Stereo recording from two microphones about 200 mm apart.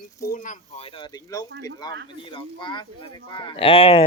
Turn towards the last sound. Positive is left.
turn(degrees=30)  # may be behind; listen again after turning